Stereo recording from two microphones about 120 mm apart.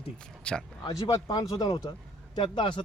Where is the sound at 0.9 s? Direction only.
30° left (ahead or behind).